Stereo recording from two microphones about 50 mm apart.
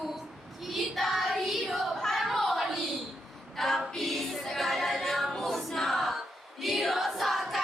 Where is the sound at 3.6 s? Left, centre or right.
Centre.